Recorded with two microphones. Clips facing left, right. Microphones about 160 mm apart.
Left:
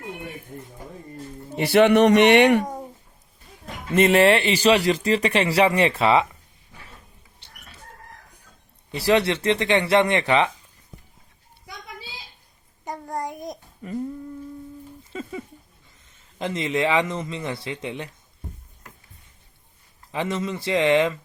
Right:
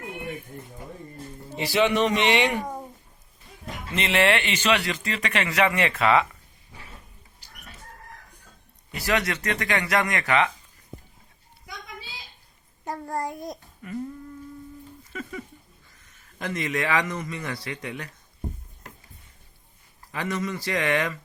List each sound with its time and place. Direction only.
1.5 s a man's voice: 60° left (ahead or behind)
3.9 s speech: 45° left (ahead or behind)
7.4 s a sound: 30° left (ahead or behind)
8.9 s speech: 30° left (ahead or behind)
13.2 s a child's voice: 20° left (ahead or behind)
15.1 s a sound: 25° left (ahead or behind)
16.4 s speech: 25° left (ahead or behind)
20.1 s speech: 25° left (ahead or behind)